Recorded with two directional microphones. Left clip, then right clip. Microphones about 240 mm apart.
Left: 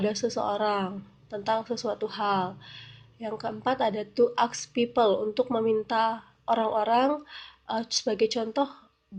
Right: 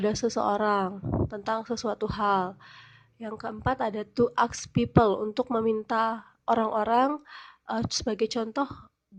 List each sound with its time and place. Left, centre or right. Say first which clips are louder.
0.0 s a woman's voice: right 1 dB; right